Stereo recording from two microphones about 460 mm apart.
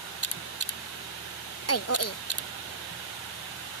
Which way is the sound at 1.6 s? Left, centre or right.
Left.